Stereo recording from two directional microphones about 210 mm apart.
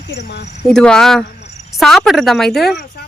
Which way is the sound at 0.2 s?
55° left (ahead or behind).